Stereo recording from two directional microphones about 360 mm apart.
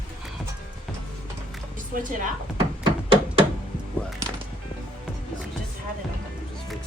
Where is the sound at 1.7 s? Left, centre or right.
Right.